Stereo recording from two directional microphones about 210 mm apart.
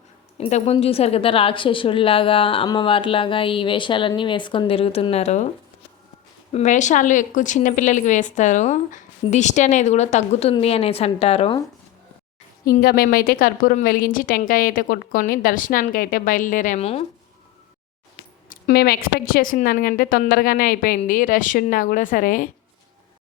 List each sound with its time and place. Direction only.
0.3 s a woman's voice: 30° left (ahead or behind)
6.5 s a woman's voice: 35° left (ahead or behind)
12.6 s a woman's voice: 45° left (ahead or behind)
18.4 s a woman's voice: 50° left (ahead or behind)